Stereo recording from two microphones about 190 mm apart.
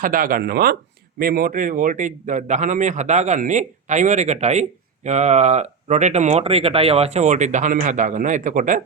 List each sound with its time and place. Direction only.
0.0 s speech: 50° right (ahead or behind)